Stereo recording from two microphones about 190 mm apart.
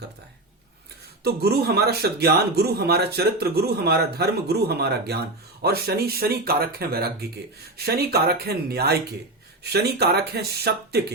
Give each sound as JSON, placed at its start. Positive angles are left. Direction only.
{"t": 1.2, "sound": "speech", "side_deg": -55}